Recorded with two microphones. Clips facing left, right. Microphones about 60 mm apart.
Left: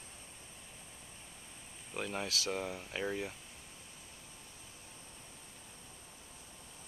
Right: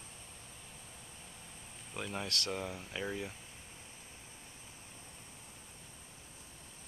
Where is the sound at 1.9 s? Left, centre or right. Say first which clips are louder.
Left 1 dB; centre.